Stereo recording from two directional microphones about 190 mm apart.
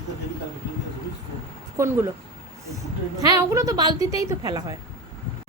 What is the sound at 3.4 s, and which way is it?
A woman's voice, 15° right (ahead or behind).